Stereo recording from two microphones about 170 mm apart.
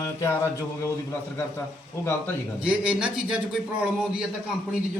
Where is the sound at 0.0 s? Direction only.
15° left (ahead or behind).